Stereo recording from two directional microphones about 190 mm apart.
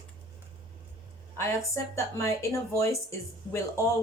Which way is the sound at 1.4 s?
15° left (ahead or behind).